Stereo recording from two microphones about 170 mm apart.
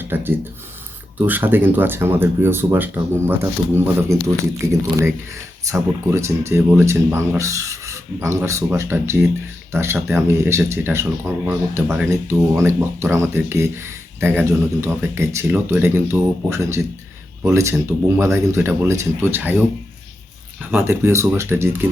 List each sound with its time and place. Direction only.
0.0 s speech: 10° right (ahead or behind)